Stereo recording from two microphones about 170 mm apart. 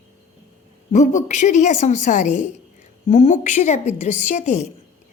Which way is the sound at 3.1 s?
35° left (ahead or behind).